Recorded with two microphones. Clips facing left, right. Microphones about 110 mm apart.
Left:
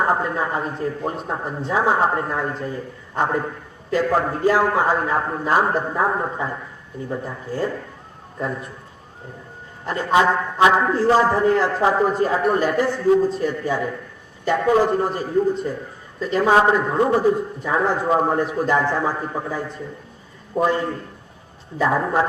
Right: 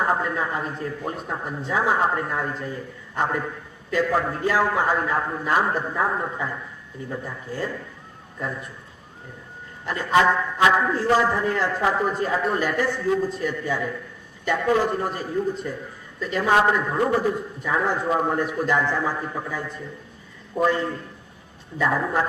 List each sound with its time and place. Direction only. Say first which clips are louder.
0.0 s a man's voice: left 3 dB; 30° left (ahead or behind)
9.8 s a man's voice: left 2 dB; 30° left (ahead or behind)